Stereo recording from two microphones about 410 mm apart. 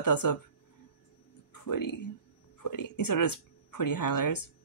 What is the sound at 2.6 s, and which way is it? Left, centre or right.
Speech, left.